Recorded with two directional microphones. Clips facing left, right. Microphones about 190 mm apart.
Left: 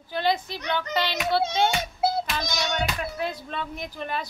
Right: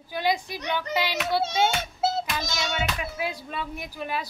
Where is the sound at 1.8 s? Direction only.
15° left (ahead or behind).